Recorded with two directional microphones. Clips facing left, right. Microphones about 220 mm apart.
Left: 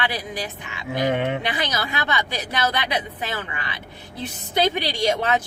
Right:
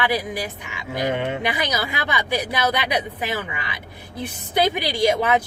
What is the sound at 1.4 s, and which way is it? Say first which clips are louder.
Speech: right 2 dB; 10° right (ahead or behind).